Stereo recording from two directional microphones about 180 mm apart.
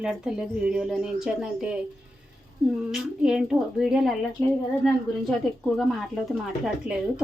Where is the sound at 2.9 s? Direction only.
5° right (ahead or behind).